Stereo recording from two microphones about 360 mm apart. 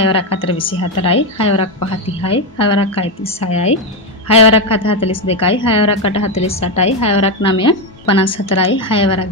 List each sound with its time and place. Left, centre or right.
0.4 s a woman's voice: centre